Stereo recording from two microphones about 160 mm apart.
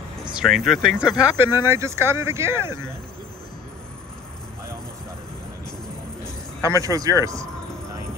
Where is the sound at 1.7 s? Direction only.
15° right (ahead or behind).